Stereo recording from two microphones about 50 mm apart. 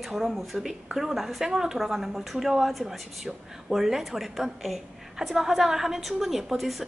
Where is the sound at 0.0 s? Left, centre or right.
Centre.